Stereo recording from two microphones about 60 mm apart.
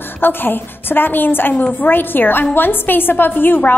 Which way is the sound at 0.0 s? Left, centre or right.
Left.